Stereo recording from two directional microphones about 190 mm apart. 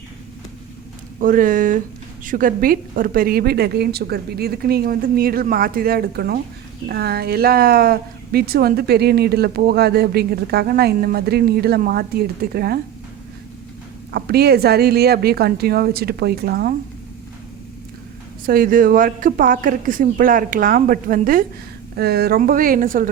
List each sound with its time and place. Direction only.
1.2 s a woman's voice: 45° right (ahead or behind)
14.1 s speech: 55° right (ahead or behind)
18.4 s a woman's voice: 50° right (ahead or behind)